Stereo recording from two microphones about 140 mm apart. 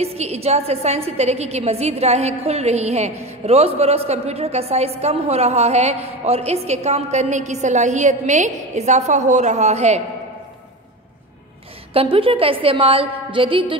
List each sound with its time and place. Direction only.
0.0 s a woman's voice: 50° right (ahead or behind)
11.9 s a woman's voice: 40° right (ahead or behind)